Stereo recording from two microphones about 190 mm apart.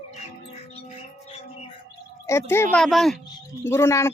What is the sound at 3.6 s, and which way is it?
Speech, 15° left (ahead or behind).